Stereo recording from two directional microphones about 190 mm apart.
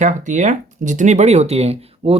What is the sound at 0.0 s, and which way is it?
Speech, 40° right (ahead or behind).